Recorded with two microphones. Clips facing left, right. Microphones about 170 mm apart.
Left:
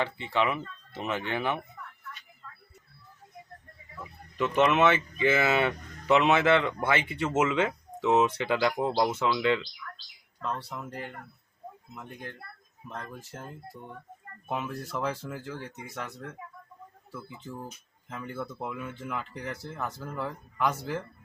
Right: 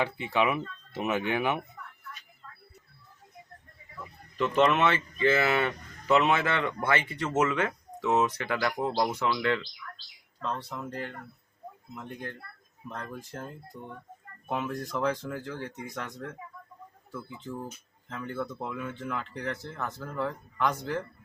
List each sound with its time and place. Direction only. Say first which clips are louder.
0.0 s speech: right 1 dB; 10° right (ahead or behind)
4.4 s speech: even; 5° left (ahead or behind)
5.1 s a man's voice: even; 15° left (ahead or behind)
10.8 s a man's voice: right 2 dB; 10° left (ahead or behind)
13.0 s a man's voice: right 3 dB; 5° left (ahead or behind)